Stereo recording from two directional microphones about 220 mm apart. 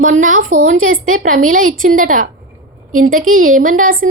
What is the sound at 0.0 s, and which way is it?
A woman's voice, 35° right (ahead or behind).